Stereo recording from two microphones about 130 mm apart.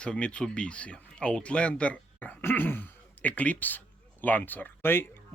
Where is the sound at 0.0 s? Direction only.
10° left (ahead or behind).